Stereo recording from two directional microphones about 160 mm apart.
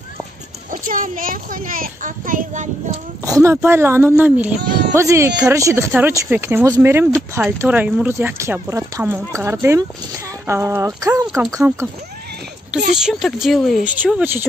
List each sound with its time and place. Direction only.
0.7 s a child's voice: 55° right (ahead or behind)
3.3 s speech: 20° right (ahead or behind)
12.9 s speech: 5° right (ahead or behind)